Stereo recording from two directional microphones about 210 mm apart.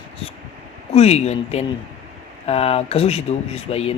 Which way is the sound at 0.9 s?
30° left (ahead or behind).